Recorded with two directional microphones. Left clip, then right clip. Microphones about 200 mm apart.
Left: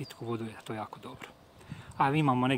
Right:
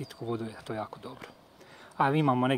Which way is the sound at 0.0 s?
5° left (ahead or behind).